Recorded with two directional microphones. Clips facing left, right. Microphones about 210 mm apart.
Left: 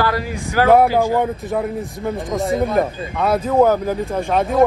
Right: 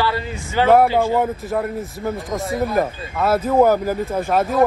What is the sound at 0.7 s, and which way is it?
Speech, centre (ahead or behind).